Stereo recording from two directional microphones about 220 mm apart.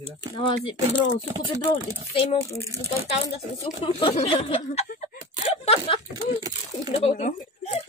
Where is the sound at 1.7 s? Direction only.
25° left (ahead or behind).